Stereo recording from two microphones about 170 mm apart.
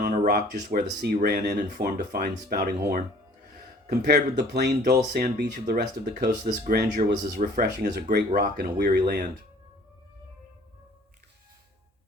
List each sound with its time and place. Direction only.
0.3 s speech: 60° right (ahead or behind)
1.5 s speech: 55° right (ahead or behind)
4.0 s speech: 70° right (ahead or behind)
6.4 s speech: 55° right (ahead or behind)
7.3 s speech: 55° right (ahead or behind)